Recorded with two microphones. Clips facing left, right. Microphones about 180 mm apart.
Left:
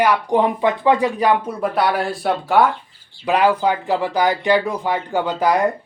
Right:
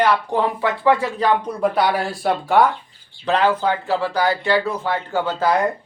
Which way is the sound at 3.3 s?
10° left (ahead or behind).